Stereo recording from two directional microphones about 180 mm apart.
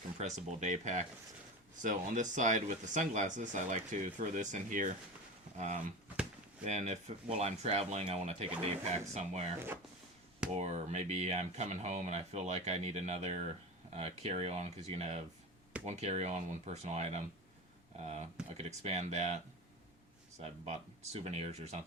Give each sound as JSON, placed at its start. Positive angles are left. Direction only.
{"t": 0.2, "sound": "speech", "side_deg": -40}
{"t": 10.5, "sound": "speech", "side_deg": -40}
{"t": 20.4, "sound": "speech", "side_deg": -35}